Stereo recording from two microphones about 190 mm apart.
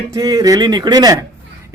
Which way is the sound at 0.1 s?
20° right (ahead or behind).